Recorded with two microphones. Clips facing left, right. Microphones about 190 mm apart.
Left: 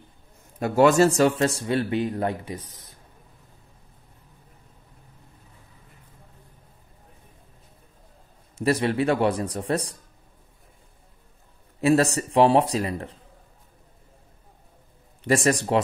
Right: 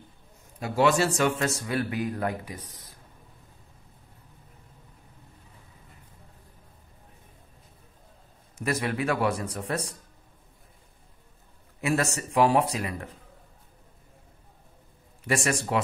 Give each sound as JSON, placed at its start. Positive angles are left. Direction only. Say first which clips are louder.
{"t": 0.6, "sound": "speech", "louder": "left 6 dB", "side_deg": 50}
{"t": 2.7, "sound": "a sound", "louder": "even", "side_deg": 25}
{"t": 8.5, "sound": "a man's voice", "louder": "left 6 dB", "side_deg": 30}
{"t": 11.8, "sound": "a man's voice", "louder": "left 7 dB", "side_deg": 35}
{"t": 15.2, "sound": "a man's voice", "louder": "left 6 dB", "side_deg": 35}